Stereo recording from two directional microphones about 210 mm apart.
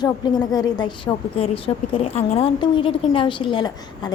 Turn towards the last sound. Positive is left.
turn(degrees=25)  # may be behind; listen again after turning